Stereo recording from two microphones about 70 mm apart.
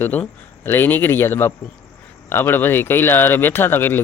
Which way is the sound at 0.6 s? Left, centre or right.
Left.